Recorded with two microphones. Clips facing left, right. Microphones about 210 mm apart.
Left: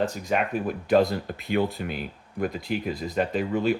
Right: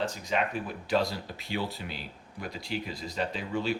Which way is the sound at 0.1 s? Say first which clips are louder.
Left 4 dB; 50° left (ahead or behind).